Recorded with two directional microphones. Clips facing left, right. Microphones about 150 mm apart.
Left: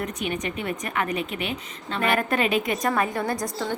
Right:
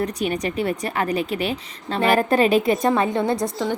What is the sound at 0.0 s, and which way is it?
A woman's voice, 35° right (ahead or behind).